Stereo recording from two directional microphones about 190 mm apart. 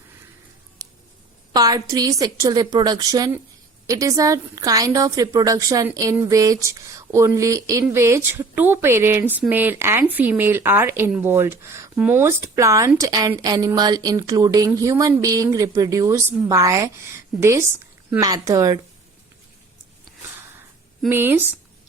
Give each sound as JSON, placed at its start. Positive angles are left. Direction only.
{"t": 0.8, "sound": "a sound", "side_deg": -20}
{"t": 1.5, "sound": "a woman's voice", "side_deg": -20}
{"t": 21.1, "sound": "a woman's voice", "side_deg": -10}